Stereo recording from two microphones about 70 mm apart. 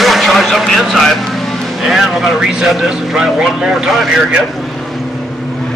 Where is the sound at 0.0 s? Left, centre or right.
Centre.